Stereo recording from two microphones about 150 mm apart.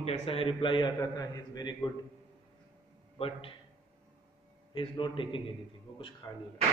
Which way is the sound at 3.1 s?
40° left (ahead or behind).